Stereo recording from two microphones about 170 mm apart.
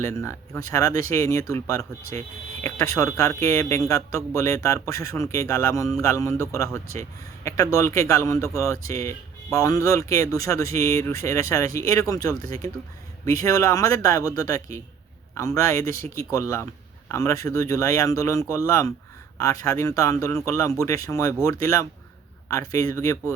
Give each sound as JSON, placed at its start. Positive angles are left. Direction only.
{"t": 0.0, "sound": "speech", "side_deg": 15}